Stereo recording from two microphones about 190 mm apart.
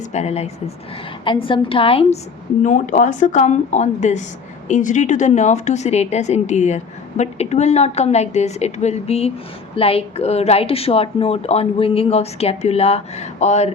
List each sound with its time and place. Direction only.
0.1 s a woman's voice: 35° left (ahead or behind)
2.6 s speech: 40° left (ahead or behind)